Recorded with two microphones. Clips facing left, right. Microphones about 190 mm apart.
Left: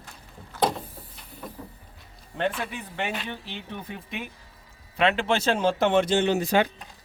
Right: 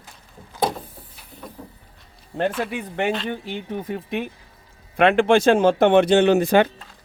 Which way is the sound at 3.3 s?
50° right (ahead or behind).